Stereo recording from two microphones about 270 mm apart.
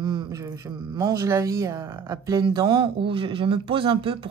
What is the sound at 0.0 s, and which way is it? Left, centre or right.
Speech, centre.